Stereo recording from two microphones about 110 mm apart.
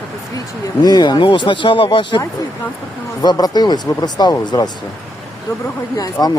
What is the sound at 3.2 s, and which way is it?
Speech, 35° left (ahead or behind).